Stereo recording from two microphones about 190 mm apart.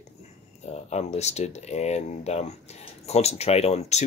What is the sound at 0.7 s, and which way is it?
Speech, 35° left (ahead or behind).